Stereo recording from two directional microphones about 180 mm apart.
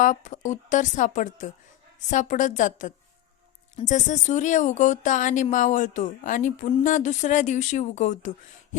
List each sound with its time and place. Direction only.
0.0 s speech: 45° left (ahead or behind)